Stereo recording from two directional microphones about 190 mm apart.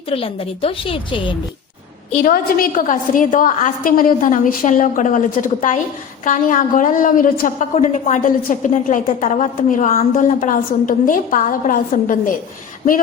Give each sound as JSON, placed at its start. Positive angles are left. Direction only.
{"t": 0.1, "sound": "a woman's voice", "side_deg": 30}
{"t": 2.1, "sound": "a woman's voice", "side_deg": 45}